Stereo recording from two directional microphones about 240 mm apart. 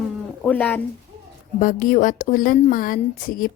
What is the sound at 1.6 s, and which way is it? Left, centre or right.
A woman's voice, left.